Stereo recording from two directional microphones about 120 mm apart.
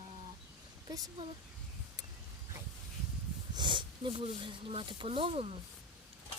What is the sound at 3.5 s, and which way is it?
Speech, 40° right (ahead or behind).